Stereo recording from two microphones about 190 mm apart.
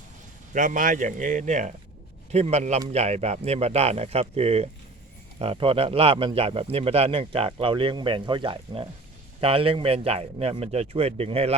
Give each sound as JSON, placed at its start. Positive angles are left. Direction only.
{"t": 0.5, "sound": "speech", "side_deg": -45}